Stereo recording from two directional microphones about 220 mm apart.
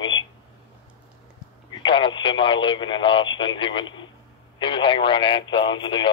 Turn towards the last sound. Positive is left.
turn(degrees=20)  # may be behind; listen again after turning